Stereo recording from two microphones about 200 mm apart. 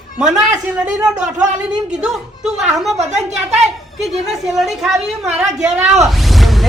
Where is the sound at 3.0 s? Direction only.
35° right (ahead or behind).